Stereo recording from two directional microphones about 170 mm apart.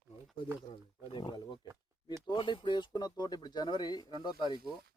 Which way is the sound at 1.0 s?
30° left (ahead or behind).